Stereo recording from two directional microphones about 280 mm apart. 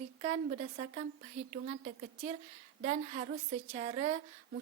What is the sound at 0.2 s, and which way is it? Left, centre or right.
A woman's voice, right.